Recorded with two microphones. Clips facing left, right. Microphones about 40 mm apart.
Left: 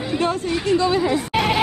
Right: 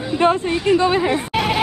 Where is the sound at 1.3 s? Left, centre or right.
Centre.